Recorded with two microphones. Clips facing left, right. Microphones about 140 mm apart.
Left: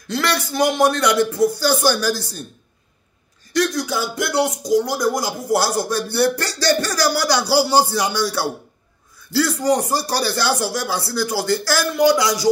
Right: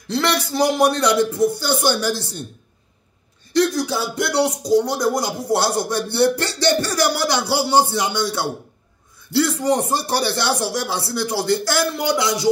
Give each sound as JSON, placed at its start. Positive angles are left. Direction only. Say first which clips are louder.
{"t": 0.1, "sound": "speech", "louder": "right 1 dB", "side_deg": -25}
{"t": 3.5, "sound": "speech", "louder": "right 2 dB", "side_deg": -30}